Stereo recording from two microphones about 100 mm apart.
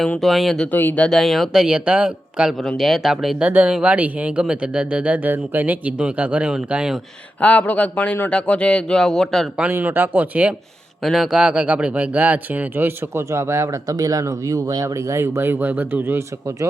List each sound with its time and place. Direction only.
0.0 s speech: 5° left (ahead or behind)
0.7 s speech: 20° left (ahead or behind)
1.0 s speech: centre (ahead or behind)
7.4 s speech: 15° left (ahead or behind)
9.7 s speech: 20° right (ahead or behind)
11.0 s speech: centre (ahead or behind); by 16.2 s 20° right (ahead or behind)